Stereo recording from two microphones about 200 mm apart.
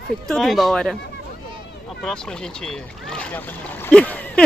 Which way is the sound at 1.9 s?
5° left (ahead or behind).